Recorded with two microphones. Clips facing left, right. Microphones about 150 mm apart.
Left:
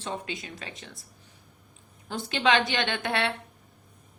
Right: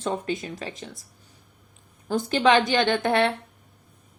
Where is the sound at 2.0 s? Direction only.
40° right (ahead or behind).